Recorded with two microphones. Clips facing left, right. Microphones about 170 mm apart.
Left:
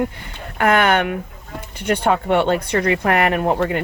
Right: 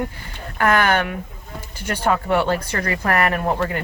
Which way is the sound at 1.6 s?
65° left (ahead or behind).